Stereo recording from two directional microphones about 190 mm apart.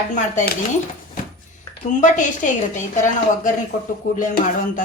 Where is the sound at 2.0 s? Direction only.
40° left (ahead or behind).